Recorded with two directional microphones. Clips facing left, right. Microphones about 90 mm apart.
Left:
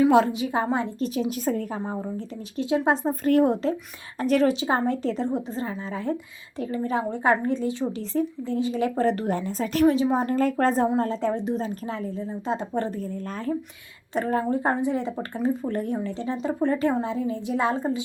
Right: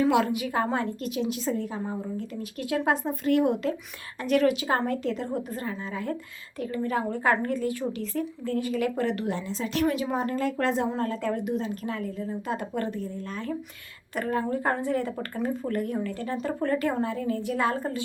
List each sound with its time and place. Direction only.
0.1 s a woman's voice: 30° left (ahead or behind)
0.6 s a woman's voice: 20° left (ahead or behind)
1.3 s a woman's voice: 45° left (ahead or behind)
1.9 s a woman's voice: 30° left (ahead or behind)
3.0 s a woman's voice: 40° left (ahead or behind)
9.9 s a woman's voice: 30° left (ahead or behind)
10.8 s a woman's voice: 30° left (ahead or behind)
14.1 s a woman's voice: 30° left (ahead or behind)